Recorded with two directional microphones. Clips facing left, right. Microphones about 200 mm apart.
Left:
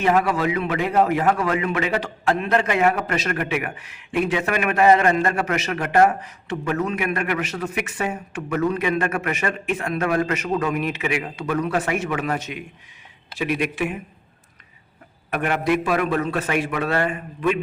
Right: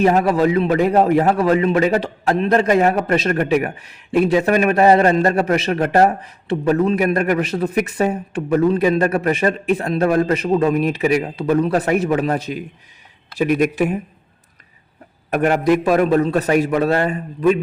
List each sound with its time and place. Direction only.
0.0 s a man's voice: 35° right (ahead or behind)
15.3 s a man's voice: 40° right (ahead or behind)